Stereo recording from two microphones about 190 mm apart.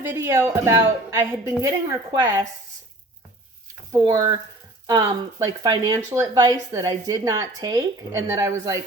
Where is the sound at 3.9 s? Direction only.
20° right (ahead or behind).